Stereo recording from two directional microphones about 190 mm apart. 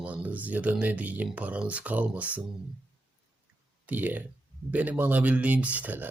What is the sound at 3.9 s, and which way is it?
Speech, 10° right (ahead or behind).